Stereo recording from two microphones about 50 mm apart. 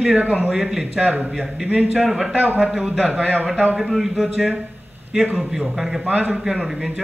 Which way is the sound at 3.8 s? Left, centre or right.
Centre.